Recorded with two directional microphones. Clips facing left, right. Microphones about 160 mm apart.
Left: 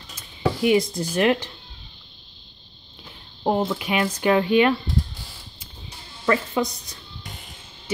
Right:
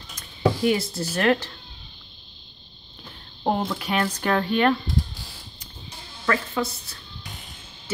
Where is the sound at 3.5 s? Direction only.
5° left (ahead or behind).